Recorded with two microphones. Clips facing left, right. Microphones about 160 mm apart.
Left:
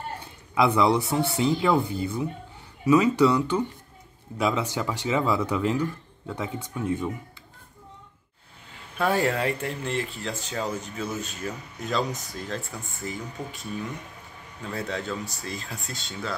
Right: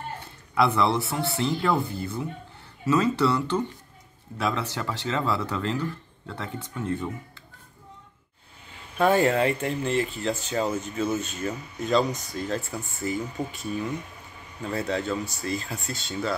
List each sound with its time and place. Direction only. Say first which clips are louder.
0.6 s speech: left 2 dB; 15° left (ahead or behind)
9.0 s speech: right 3 dB; centre (ahead or behind)